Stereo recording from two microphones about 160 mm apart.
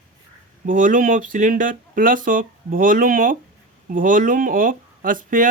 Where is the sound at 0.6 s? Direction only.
55° right (ahead or behind).